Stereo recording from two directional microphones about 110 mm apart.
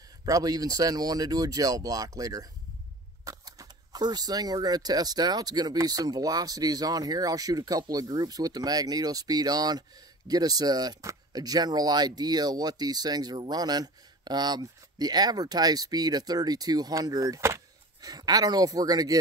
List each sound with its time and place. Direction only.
0.2 s speech: 35° right (ahead or behind)